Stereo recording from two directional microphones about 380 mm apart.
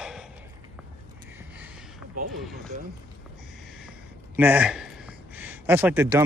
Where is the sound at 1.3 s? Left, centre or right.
Centre.